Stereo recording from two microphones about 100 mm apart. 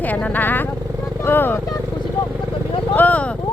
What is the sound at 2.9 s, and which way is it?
Vehicle, 15° left (ahead or behind).